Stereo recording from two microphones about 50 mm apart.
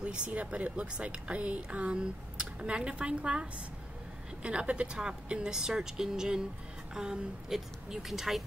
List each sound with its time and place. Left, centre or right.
0.0 s speech: right; by 8.4 s centre